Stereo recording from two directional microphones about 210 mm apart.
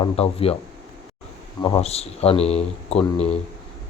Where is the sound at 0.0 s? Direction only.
25° left (ahead or behind).